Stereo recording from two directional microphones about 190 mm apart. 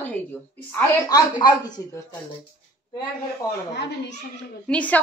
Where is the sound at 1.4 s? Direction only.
20° left (ahead or behind).